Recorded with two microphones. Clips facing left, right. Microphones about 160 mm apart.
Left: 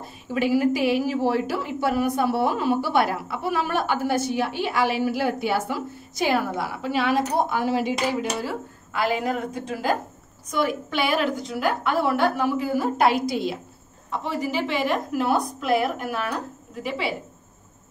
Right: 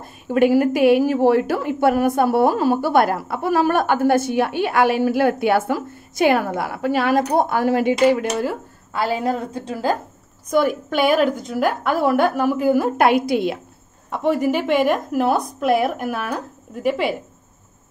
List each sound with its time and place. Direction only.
0.0 s a woman's voice: 55° right (ahead or behind)
8.9 s a woman's voice: 35° right (ahead or behind)
10.5 s a woman's voice: 50° right (ahead or behind)